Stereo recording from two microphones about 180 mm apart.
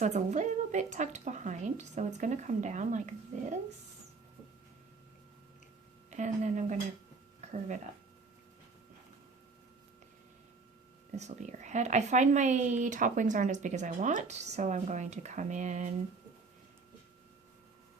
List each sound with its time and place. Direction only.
0.0 s a woman's voice: 40° right (ahead or behind)
6.1 s speech: 40° right (ahead or behind)
11.2 s speech: 40° right (ahead or behind)